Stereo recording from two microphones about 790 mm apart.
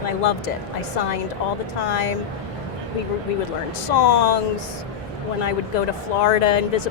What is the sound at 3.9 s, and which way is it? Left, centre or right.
Speech, left.